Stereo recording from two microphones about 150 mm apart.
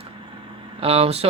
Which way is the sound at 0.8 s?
40° right (ahead or behind).